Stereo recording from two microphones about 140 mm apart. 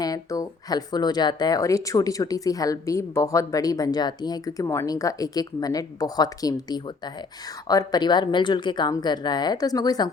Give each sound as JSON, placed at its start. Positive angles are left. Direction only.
{"t": 0.0, "sound": "speech", "side_deg": 25}